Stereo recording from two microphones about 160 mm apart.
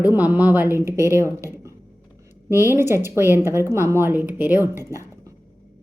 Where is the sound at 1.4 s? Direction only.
15° right (ahead or behind).